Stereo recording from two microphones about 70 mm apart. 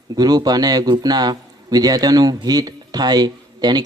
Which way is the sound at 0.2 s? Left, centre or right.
Right.